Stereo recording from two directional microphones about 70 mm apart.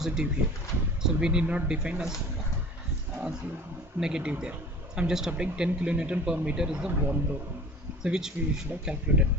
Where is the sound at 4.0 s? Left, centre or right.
Centre.